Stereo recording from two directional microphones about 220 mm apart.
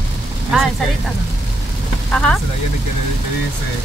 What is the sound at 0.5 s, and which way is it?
Speech, 5° right (ahead or behind).